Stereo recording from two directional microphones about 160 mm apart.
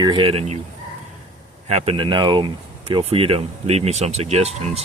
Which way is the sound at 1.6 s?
40° right (ahead or behind).